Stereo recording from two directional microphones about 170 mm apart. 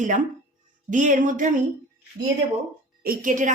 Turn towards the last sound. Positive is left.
turn(degrees=-50)  # may be behind; listen again after turning